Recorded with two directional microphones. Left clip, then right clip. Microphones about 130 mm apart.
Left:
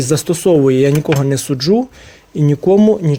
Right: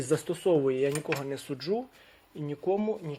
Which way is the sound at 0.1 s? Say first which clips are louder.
Left 13 dB; 35° left (ahead or behind).